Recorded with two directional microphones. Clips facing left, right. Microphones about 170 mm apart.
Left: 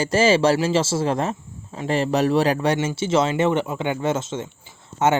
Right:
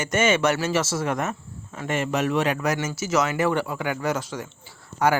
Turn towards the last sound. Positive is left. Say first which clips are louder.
# left 2 dB
turn(degrees=25)  # may be behind; listen again after turning